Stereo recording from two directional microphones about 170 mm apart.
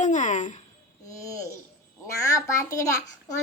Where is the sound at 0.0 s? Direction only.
45° left (ahead or behind).